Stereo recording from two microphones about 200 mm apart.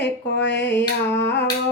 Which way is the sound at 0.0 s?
60° left (ahead or behind).